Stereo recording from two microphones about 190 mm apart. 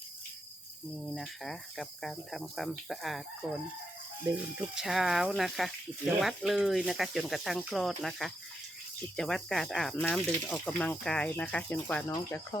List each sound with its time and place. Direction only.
1.0 s speech: centre (ahead or behind)
4.7 s speech: centre (ahead or behind)
12.1 s speech: 20° left (ahead or behind)